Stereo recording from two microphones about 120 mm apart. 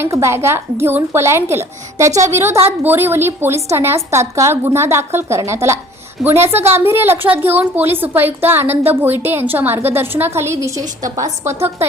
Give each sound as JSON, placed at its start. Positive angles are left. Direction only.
{"t": 0.0, "sound": "a woman's voice", "side_deg": -25}